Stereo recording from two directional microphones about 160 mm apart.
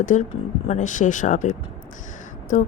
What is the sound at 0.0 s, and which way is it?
Speech, 55° left (ahead or behind).